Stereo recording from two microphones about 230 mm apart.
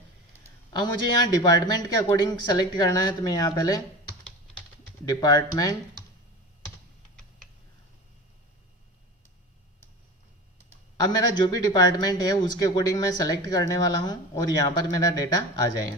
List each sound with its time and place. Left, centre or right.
0.7 s speech: centre
5.0 s speech: centre
11.0 s speech: centre